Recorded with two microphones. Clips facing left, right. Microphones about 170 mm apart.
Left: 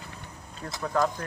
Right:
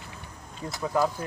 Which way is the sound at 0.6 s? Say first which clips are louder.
Right 1 dB; 5° right (ahead or behind).